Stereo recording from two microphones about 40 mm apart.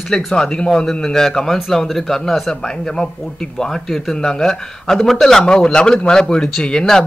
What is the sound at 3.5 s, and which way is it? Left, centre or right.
Speech, centre.